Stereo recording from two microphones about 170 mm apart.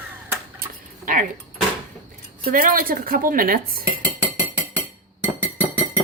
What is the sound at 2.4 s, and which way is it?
A woman's voice, 55° right (ahead or behind).